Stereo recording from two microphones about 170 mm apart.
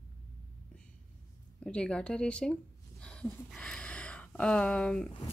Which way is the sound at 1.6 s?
5° left (ahead or behind).